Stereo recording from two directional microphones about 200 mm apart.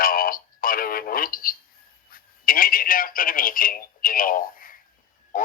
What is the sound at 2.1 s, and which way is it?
Speech, 45° left (ahead or behind).